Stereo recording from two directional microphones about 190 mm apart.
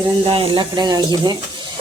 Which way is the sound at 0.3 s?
30° right (ahead or behind).